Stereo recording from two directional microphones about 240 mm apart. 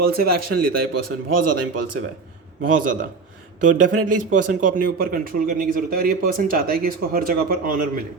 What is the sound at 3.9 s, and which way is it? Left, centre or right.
Speech, right.